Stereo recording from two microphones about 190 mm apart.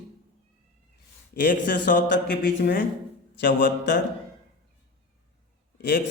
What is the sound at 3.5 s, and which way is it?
Speech, 70° left (ahead or behind).